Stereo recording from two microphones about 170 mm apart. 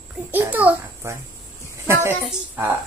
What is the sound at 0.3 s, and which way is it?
Speech, 10° right (ahead or behind).